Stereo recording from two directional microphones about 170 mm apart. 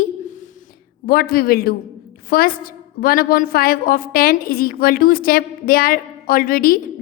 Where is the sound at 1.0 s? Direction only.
60° left (ahead or behind).